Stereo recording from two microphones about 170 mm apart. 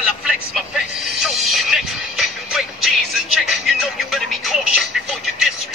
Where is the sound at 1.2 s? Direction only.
Centre (ahead or behind).